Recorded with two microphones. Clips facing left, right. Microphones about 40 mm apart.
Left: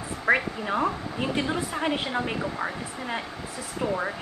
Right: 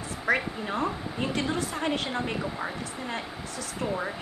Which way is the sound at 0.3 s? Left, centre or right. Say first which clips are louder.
Left 3 dB; centre.